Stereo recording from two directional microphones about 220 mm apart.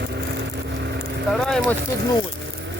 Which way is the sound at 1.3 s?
Centre (ahead or behind).